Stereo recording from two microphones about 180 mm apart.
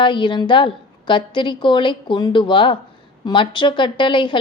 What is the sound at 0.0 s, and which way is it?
A woman's voice, 25° left (ahead or behind).